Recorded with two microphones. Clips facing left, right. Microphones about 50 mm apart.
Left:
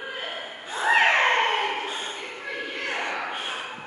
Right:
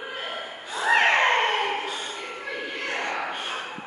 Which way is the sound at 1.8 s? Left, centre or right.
Left.